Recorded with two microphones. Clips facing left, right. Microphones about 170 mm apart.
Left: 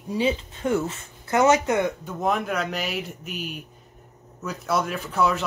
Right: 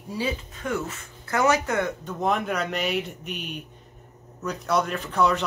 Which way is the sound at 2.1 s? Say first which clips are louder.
Even; centre (ahead or behind).